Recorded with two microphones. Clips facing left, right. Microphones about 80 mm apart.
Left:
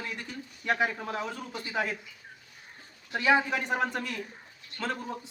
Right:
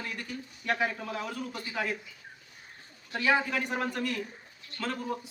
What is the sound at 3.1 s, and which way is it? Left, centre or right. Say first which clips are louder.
A man's voice: left 2 dB; centre.